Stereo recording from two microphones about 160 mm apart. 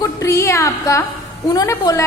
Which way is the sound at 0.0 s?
20° left (ahead or behind).